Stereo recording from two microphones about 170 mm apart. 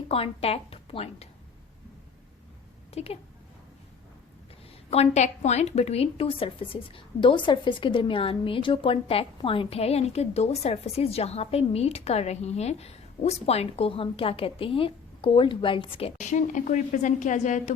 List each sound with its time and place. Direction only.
0.1 s a woman's voice: 35° left (ahead or behind)
2.9 s a woman's voice: 35° left (ahead or behind)
4.9 s a woman's voice: 40° left (ahead or behind)